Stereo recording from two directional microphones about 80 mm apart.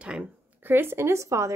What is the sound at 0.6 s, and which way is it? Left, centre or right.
Speech, right.